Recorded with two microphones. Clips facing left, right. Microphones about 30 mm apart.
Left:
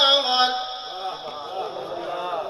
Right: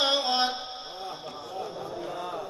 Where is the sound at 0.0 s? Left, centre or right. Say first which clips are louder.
Left 7 dB; left.